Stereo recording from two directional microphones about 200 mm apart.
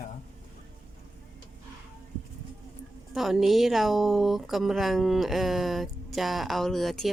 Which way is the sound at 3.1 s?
Centre (ahead or behind).